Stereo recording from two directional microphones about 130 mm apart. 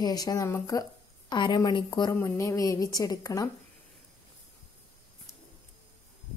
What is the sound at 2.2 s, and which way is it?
Speech, 25° left (ahead or behind).